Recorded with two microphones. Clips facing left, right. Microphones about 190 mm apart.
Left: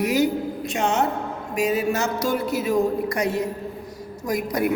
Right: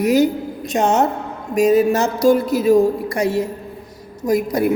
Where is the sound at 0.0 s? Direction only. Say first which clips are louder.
Right 5 dB; 40° right (ahead or behind).